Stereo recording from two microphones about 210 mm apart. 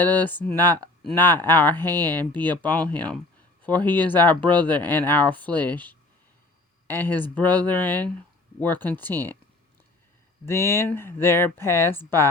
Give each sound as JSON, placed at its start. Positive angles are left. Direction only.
{"t": 0.0, "sound": "speech", "side_deg": 10}
{"t": 10.4, "sound": "speech", "side_deg": 10}